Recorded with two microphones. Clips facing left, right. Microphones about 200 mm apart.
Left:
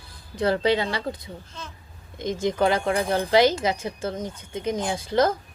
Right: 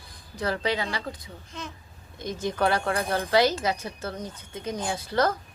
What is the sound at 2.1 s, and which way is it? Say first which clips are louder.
Speech: left 5 dB; 25° left (ahead or behind).